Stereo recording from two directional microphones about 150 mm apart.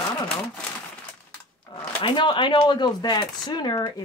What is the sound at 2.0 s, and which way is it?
Speech, 35° left (ahead or behind).